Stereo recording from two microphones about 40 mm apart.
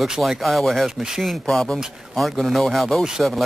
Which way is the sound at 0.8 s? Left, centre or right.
Centre.